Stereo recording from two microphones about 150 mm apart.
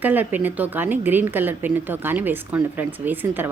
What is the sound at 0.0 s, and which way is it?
Speech, 10° right (ahead or behind).